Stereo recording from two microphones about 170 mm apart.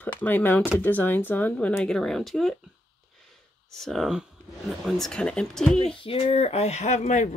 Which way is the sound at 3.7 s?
Centre (ahead or behind).